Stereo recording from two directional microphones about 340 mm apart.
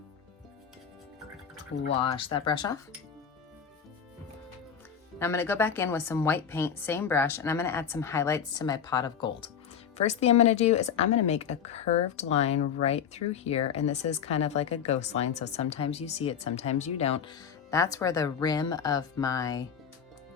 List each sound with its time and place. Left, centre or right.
1.9 s speech: centre
5.2 s a woman's voice: centre